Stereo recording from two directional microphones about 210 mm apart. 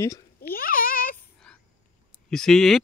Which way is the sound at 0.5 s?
40° left (ahead or behind).